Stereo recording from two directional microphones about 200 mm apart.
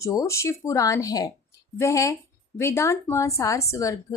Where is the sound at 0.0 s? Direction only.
15° left (ahead or behind).